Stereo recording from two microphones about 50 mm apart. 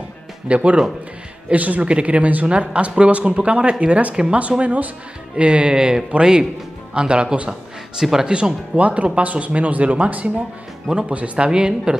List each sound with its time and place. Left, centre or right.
0.5 s speech: right
4.4 s speech: right
5.3 s speech: centre
8.0 s speech: centre
8.3 s speech: centre